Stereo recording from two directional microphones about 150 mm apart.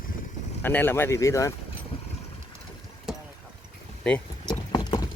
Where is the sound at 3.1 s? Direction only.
5° right (ahead or behind).